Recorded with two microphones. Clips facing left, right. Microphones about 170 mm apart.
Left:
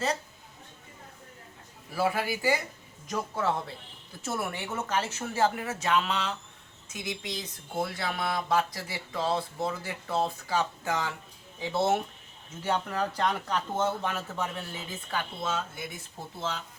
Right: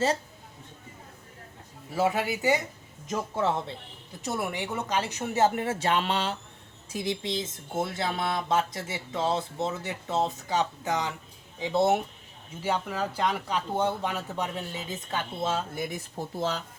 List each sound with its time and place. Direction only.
1.9 s speech: 20° right (ahead or behind); by 16.6 s 40° right (ahead or behind)